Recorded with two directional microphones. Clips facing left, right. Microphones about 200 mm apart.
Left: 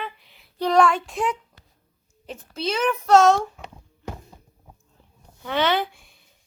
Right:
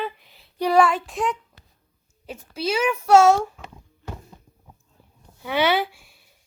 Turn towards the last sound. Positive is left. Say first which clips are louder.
# right 1 dB
turn(degrees=-5)  # may be behind; listen again after turning